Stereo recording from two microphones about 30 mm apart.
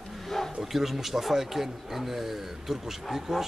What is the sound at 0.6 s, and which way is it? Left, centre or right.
A man's voice, centre.